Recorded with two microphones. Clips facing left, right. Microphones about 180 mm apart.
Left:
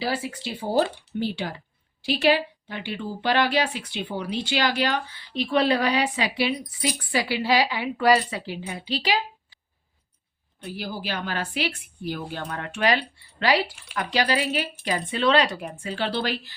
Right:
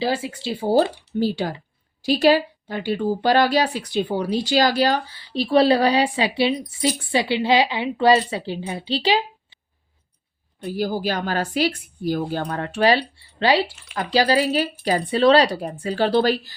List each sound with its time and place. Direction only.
0.0 s a woman's voice: 25° right (ahead or behind)
10.7 s a woman's voice: 45° right (ahead or behind)